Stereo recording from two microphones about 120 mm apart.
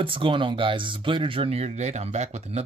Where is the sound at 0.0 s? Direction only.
45° right (ahead or behind).